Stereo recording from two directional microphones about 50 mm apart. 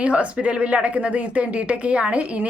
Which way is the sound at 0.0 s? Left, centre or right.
Right.